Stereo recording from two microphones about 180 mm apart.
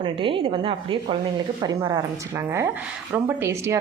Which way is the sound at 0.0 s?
30° right (ahead or behind).